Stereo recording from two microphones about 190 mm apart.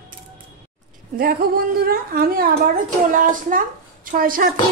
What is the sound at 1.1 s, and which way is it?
A woman's voice, 50° right (ahead or behind).